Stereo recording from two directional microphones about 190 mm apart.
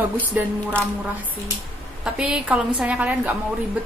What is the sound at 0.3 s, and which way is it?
Speech, 10° right (ahead or behind).